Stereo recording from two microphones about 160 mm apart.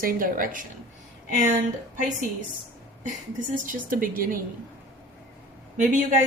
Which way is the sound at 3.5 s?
55° right (ahead or behind).